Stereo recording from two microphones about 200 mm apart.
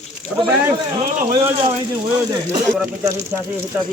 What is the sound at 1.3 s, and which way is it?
Speech, 20° right (ahead or behind).